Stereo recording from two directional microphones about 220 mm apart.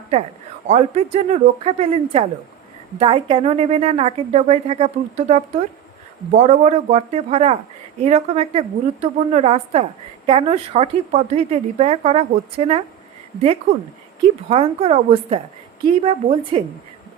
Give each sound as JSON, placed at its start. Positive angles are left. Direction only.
{"t": 0.7, "sound": "speech", "side_deg": -30}